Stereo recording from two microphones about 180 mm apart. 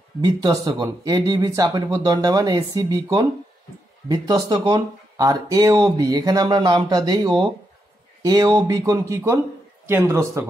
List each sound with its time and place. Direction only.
0.2 s a man's voice: 20° right (ahead or behind)